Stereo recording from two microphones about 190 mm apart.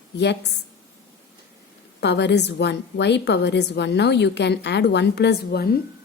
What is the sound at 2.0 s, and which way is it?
A woman's voice, 65° left (ahead or behind).